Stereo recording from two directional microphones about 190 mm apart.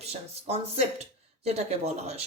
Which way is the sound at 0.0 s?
35° right (ahead or behind).